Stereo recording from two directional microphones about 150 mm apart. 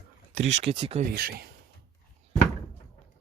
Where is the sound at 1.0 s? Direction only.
80° right.